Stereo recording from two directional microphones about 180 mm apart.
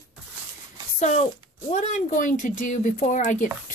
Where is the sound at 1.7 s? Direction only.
40° left (ahead or behind).